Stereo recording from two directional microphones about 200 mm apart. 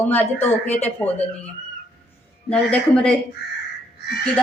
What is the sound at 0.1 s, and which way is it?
Speech, 10° left (ahead or behind).